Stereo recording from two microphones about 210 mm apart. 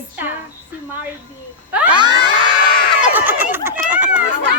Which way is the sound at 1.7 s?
5° right (ahead or behind).